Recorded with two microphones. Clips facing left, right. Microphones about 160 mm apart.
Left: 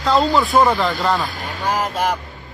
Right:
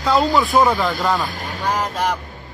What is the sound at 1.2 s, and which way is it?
Vehicle, 45° right (ahead or behind).